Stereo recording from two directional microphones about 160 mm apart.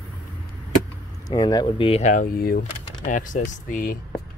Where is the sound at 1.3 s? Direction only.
25° left (ahead or behind).